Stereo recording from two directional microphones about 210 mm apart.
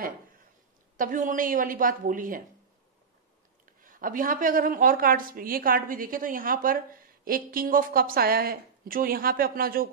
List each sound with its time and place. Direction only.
0.9 s a woman's voice: 40° right (ahead or behind)
3.8 s a woman's voice: 40° right (ahead or behind)